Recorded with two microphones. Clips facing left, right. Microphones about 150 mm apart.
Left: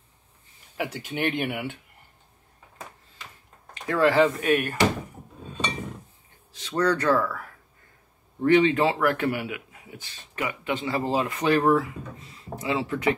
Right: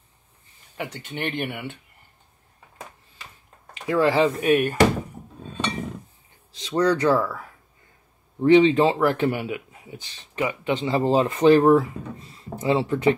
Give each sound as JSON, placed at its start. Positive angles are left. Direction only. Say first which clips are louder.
{"t": 0.7, "sound": "speech", "louder": "left 2 dB", "side_deg": 5}
{"t": 3.7, "sound": "speech", "louder": "right 1 dB", "side_deg": -15}
{"t": 6.6, "sound": "speech", "louder": "right 3 dB", "side_deg": -15}